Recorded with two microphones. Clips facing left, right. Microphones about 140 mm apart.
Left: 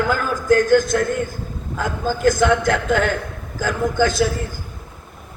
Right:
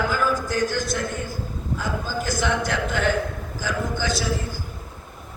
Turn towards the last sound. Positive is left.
turn(degrees=50)  # may be behind; listen again after turning